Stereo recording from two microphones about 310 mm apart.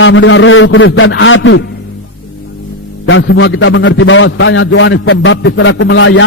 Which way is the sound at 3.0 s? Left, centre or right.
Left.